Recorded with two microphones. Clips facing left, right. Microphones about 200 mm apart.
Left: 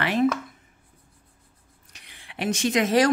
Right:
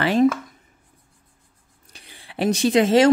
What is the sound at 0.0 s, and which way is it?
Speech, 30° right (ahead or behind).